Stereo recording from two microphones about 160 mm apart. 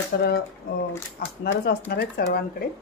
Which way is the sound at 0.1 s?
90° left.